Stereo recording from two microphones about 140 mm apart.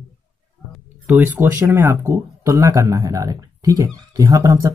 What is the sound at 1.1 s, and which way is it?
Speech, 15° right (ahead or behind).